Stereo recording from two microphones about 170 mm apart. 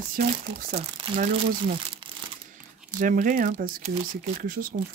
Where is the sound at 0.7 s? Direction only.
30° right (ahead or behind).